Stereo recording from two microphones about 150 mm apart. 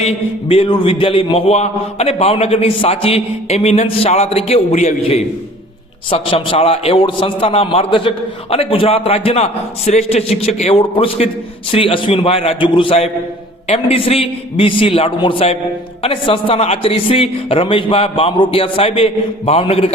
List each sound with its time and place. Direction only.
0.0 s a man's voice: 40° left (ahead or behind)